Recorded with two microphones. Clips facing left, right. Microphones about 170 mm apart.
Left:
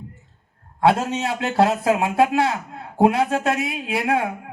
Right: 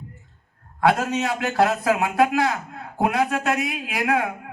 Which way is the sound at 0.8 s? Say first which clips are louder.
Left 1 dB; 30° left (ahead or behind).